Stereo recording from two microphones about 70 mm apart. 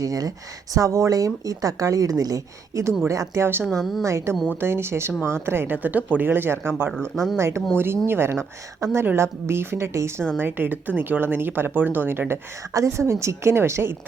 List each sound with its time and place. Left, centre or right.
0.0 s a woman's voice: right
3.7 s a woman's voice: centre
4.0 s a woman's voice: right
5.7 s a woman's voice: right
10.4 s speech: right
12.7 s a woman's voice: right